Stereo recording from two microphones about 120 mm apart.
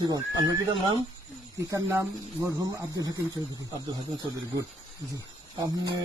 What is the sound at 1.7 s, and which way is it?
Speech, 25° right (ahead or behind).